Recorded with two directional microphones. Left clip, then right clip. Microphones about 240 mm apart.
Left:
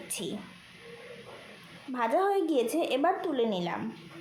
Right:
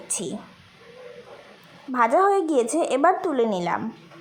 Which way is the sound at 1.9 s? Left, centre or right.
Centre.